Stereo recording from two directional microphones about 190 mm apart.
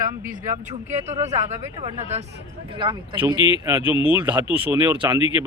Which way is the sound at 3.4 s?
25° left (ahead or behind).